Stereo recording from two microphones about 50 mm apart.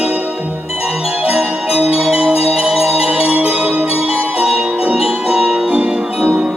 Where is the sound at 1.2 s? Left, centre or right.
Centre.